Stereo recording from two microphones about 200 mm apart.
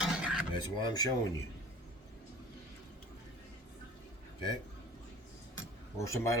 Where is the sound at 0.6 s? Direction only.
20° left (ahead or behind).